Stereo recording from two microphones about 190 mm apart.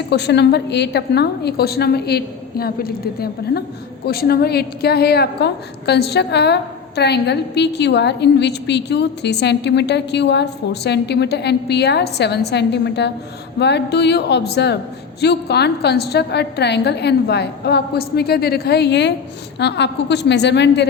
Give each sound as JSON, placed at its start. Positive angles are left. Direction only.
{"t": 0.1, "sound": "a woman's voice", "side_deg": 60}